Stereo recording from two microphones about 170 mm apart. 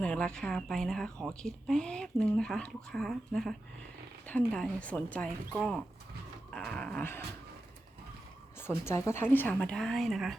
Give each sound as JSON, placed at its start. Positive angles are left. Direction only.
{"t": 0.0, "sound": "speech", "side_deg": 5}
{"t": 8.8, "sound": "speech", "side_deg": 15}